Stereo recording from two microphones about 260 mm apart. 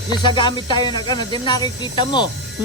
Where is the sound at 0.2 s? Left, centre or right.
Centre.